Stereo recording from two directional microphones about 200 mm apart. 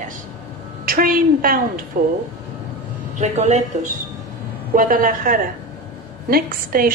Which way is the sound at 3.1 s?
35° right (ahead or behind).